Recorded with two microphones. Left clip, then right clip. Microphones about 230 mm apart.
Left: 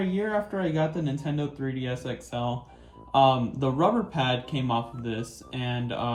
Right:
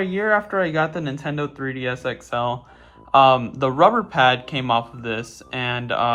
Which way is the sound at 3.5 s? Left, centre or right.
Centre.